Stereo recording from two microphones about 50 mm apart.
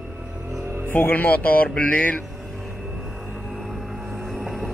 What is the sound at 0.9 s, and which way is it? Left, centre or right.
Speech, left.